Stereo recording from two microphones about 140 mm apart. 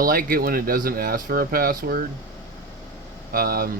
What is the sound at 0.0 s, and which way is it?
Speech, 90° right.